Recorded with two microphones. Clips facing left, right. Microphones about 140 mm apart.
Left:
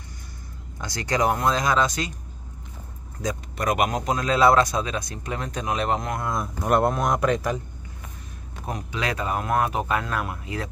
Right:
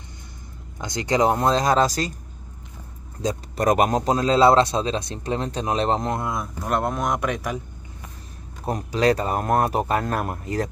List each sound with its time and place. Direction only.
0.7 s speech: 20° right (ahead or behind); by 2.1 s 40° right (ahead or behind)
3.2 s speech: 35° right (ahead or behind)
6.6 s speech: 5° left (ahead or behind)
8.6 s speech: 35° right (ahead or behind)